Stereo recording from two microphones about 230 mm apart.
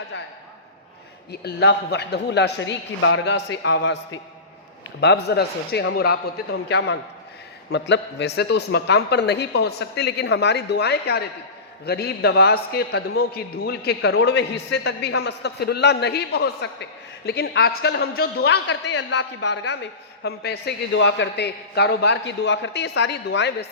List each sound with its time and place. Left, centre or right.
1.3 s a man's voice: left